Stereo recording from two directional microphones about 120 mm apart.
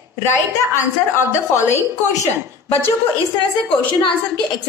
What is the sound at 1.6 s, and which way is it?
Speech, 25° left (ahead or behind).